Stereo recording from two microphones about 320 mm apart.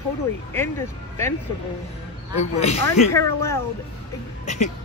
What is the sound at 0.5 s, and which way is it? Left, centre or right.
Speech, centre.